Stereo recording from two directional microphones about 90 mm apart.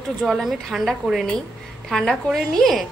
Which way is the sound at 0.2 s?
Centre (ahead or behind).